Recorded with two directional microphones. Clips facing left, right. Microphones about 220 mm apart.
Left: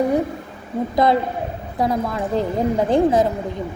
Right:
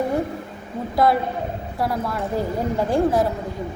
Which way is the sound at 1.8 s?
20° left (ahead or behind).